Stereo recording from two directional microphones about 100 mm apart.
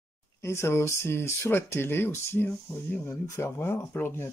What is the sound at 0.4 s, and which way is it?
Speech, 30° left (ahead or behind).